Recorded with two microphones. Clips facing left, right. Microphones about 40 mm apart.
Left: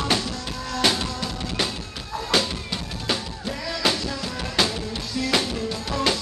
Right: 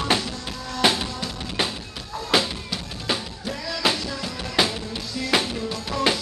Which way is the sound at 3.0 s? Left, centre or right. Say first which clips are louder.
Even; centre.